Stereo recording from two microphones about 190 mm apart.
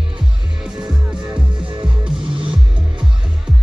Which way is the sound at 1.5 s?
25° right (ahead or behind).